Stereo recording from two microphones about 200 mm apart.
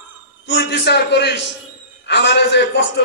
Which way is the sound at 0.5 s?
55° left (ahead or behind).